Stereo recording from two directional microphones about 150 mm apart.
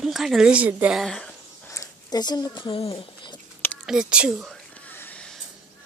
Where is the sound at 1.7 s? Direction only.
20° left (ahead or behind).